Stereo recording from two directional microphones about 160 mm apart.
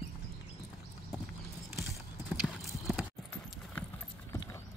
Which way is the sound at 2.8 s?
Centre (ahead or behind).